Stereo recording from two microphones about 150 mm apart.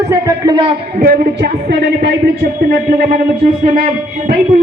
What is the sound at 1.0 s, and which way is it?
A woman's voice, 80° right.